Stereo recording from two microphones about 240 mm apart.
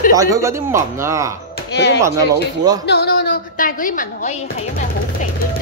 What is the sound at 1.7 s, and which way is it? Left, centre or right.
A woman's voice, left.